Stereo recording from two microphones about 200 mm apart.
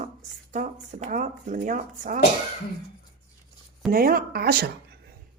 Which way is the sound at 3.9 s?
45° right (ahead or behind).